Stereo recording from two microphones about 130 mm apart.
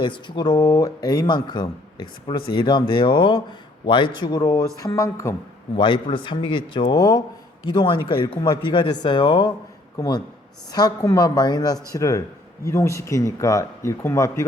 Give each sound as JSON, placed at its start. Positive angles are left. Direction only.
{"t": 0.0, "sound": "speech", "side_deg": 35}
{"t": 4.4, "sound": "speech", "side_deg": 25}
{"t": 5.7, "sound": "speech", "side_deg": 40}